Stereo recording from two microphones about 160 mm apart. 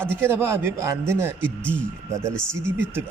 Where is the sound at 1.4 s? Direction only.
10° left (ahead or behind).